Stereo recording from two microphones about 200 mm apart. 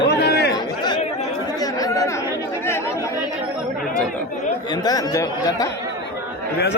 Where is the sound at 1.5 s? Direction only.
20° left (ahead or behind).